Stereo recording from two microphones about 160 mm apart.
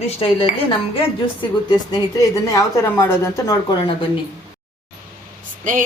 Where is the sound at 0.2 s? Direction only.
35° left (ahead or behind); by 3.5 s 15° left (ahead or behind).